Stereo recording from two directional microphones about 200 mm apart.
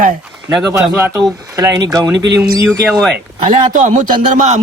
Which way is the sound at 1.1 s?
15° right (ahead or behind).